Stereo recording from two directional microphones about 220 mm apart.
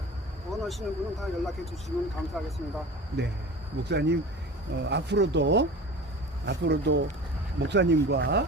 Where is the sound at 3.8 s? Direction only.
50° right (ahead or behind).